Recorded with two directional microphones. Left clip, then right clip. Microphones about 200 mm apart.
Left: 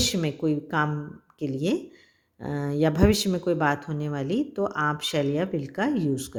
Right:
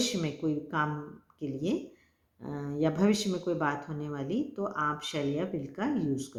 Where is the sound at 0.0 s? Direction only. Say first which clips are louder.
Left 6 dB; 45° left (ahead or behind).